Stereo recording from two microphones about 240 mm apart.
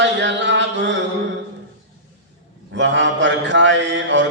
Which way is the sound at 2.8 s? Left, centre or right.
Right.